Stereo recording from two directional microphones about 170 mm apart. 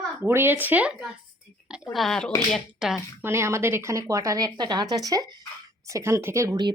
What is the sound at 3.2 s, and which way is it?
Speech, 15° right (ahead or behind).